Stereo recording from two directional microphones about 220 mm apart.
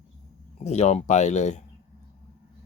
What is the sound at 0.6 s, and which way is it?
Speech, 30° left (ahead or behind).